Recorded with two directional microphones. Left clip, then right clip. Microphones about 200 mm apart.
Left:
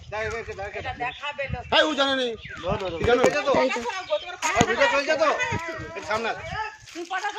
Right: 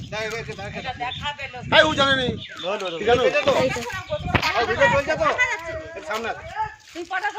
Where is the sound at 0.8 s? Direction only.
25° left (ahead or behind).